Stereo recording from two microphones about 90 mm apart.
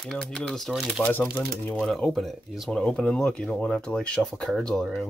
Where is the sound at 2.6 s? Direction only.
10° left (ahead or behind).